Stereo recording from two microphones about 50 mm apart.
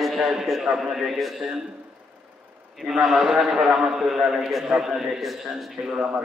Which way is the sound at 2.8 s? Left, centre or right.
Centre.